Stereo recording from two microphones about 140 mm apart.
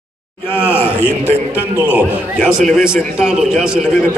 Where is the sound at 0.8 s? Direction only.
15° left (ahead or behind).